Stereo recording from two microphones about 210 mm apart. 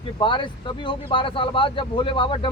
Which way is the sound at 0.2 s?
25° left (ahead or behind).